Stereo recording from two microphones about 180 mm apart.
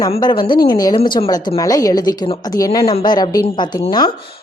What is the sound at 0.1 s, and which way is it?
A woman's voice, 25° left (ahead or behind).